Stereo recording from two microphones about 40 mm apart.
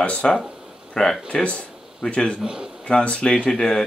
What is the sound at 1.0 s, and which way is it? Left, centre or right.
Speech, centre.